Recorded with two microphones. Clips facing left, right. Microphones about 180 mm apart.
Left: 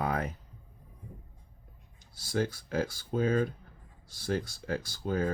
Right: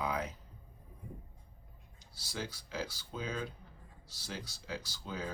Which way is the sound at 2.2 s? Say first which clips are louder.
Left 11 dB; 50° left (ahead or behind).